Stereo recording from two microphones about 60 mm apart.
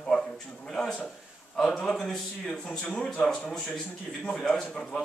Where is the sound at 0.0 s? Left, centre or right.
Centre.